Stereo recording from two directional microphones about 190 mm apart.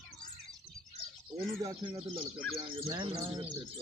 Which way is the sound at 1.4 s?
25° right (ahead or behind).